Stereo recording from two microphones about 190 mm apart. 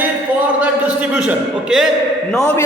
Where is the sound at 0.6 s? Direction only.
5° right (ahead or behind).